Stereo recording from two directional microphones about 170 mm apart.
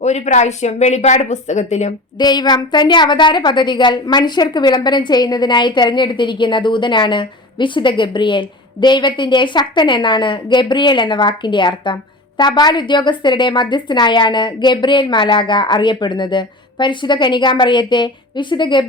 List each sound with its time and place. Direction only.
0.0 s speech: 40° left (ahead or behind)
2.1 s a woman's voice: 25° left (ahead or behind)